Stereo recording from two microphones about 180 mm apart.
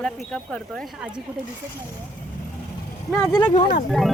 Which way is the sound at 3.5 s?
45° left (ahead or behind).